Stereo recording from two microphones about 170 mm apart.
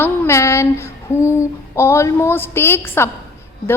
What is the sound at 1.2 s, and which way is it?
A woman's voice, 15° left (ahead or behind).